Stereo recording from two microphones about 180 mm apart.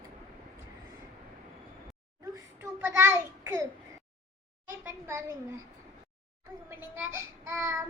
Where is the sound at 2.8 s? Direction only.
15° right (ahead or behind).